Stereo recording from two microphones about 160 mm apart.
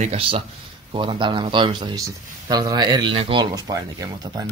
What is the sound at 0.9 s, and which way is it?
A man's voice, 30° right (ahead or behind).